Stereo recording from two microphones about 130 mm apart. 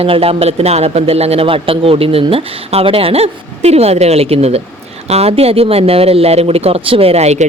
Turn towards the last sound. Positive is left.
turn(degrees=-55)  # may be behind; listen again after turning